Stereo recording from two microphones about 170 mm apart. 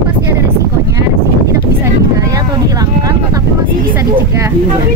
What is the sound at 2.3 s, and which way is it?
Vehicle, 20° right (ahead or behind).